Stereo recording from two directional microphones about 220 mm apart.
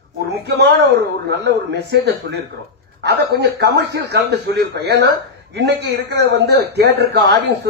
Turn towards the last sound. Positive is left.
turn(degrees=-45)  # may be behind; listen again after turning